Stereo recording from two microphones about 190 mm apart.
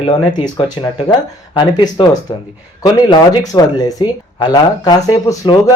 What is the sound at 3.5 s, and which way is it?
Speech, 20° left (ahead or behind).